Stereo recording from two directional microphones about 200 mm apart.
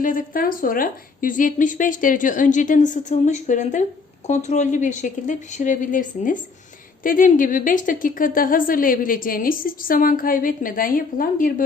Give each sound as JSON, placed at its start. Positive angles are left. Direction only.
{"t": 0.0, "sound": "a woman's voice", "side_deg": 45}